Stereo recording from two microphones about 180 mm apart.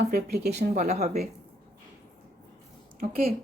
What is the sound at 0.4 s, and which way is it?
Speech, 60° right (ahead or behind).